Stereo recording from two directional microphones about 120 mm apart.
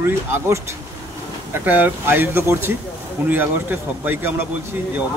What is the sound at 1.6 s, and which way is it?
Speech, 15° right (ahead or behind).